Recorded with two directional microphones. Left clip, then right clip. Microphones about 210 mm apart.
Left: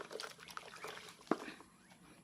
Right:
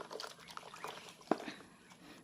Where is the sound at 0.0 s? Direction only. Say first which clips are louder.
Right 1 dB; 15° left (ahead or behind).